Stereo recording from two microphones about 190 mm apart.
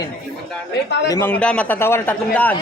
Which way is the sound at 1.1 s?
10° left (ahead or behind).